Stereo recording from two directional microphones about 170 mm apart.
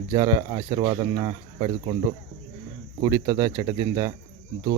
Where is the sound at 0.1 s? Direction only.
20° right (ahead or behind).